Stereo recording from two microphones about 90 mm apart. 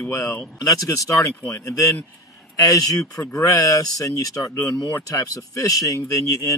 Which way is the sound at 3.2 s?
30° left (ahead or behind).